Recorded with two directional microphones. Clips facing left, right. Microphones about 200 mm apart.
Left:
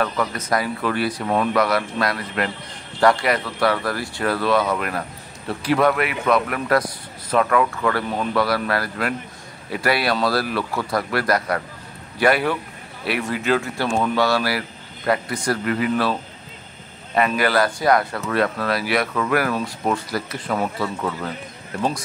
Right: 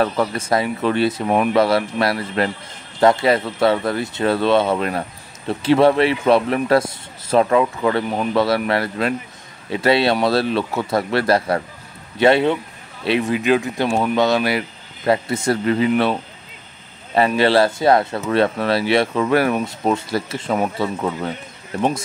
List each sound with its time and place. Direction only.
0.0 s speech: 30° right (ahead or behind)
17.4 s speech: 25° right (ahead or behind)